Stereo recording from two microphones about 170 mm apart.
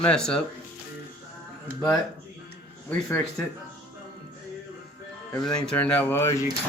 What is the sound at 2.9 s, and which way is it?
Speech, 10° left (ahead or behind).